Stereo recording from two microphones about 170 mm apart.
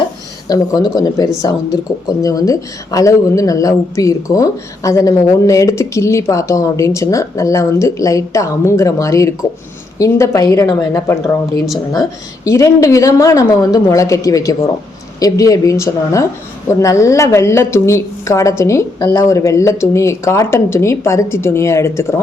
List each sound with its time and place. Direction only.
0.4 s a woman's voice: 20° left (ahead or behind)